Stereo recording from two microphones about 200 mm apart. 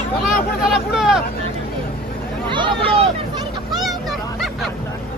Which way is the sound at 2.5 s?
25° right (ahead or behind).